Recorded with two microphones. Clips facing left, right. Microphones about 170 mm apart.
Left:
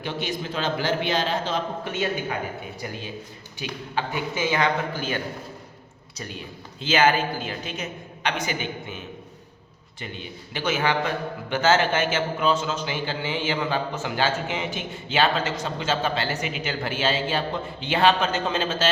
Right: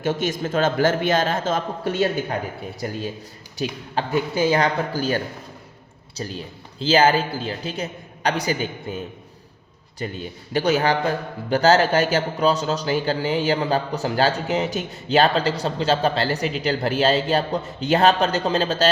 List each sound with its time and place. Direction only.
0.0 s a man's voice: 45° right (ahead or behind)
3.6 s a man's voice: 40° right (ahead or behind)
10.0 s a man's voice: 40° right (ahead or behind)